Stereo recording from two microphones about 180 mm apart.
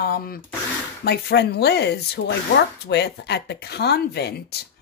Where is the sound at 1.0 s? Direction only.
65° left (ahead or behind).